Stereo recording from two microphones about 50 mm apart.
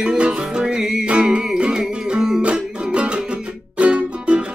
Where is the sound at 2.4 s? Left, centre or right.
Right.